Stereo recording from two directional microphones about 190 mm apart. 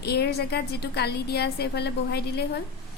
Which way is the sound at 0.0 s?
60° left (ahead or behind).